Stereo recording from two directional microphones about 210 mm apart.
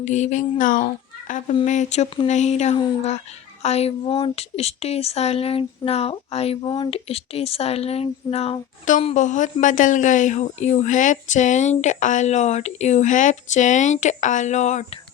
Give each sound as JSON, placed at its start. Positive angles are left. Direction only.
{"t": 0.0, "sound": "a woman's voice", "side_deg": 35}